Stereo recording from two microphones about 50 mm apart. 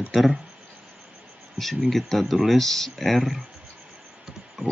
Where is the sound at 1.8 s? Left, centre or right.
Centre.